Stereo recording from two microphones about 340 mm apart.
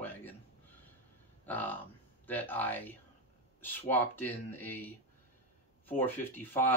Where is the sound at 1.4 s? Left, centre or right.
Centre.